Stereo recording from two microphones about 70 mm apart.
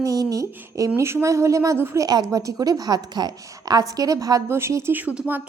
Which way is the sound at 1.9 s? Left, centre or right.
Right.